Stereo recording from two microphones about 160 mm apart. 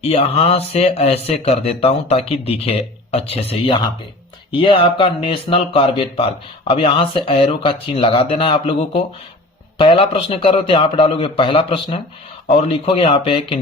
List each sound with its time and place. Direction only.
0.0 s speech: 40° left (ahead or behind)